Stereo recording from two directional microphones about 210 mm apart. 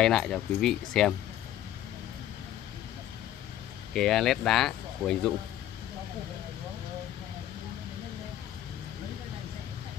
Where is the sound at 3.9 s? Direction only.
Centre (ahead or behind).